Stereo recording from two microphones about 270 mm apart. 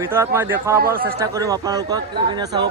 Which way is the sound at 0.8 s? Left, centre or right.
Right.